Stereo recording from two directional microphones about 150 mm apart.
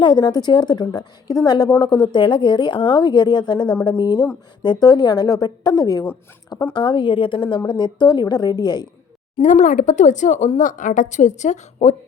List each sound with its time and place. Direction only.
0.0 s a woman's voice: 30° left (ahead or behind)
9.4 s a woman's voice: 55° left (ahead or behind)